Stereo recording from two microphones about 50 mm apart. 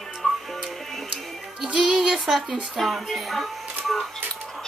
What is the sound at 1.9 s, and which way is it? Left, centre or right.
Speech, centre.